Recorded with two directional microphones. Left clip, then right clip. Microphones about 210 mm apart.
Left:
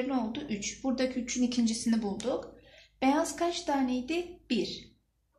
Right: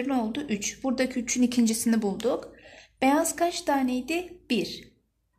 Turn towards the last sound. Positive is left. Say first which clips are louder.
# right 4 dB
turn(degrees=-45)  # may be behind; listen again after turning